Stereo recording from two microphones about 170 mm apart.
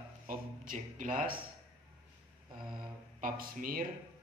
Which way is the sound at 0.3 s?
50° right (ahead or behind).